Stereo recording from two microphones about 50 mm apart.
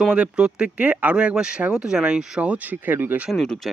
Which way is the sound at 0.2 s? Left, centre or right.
Centre.